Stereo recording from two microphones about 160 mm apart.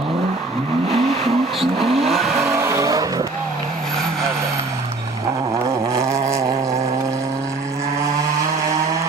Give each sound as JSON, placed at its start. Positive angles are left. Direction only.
{"t": 0.9, "sound": "vehicle", "side_deg": -40}
{"t": 2.5, "sound": "vehicle", "side_deg": -15}
{"t": 5.9, "sound": "a sound", "side_deg": -20}